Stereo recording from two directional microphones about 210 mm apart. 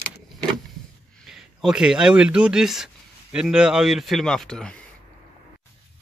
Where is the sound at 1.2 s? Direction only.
Centre (ahead or behind).